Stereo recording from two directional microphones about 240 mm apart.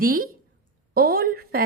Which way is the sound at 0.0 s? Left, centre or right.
Right.